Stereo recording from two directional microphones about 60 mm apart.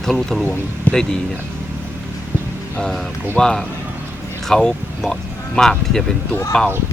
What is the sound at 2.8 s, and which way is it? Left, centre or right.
Speech, centre.